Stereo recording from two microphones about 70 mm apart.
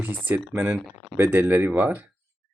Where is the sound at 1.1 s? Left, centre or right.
Right.